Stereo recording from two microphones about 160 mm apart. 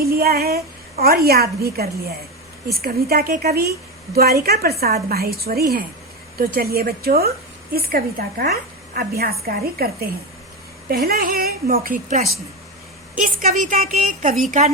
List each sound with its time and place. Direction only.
0.0 s a woman's voice: 75° right (ahead or behind); by 14.3 s 55° right (ahead or behind)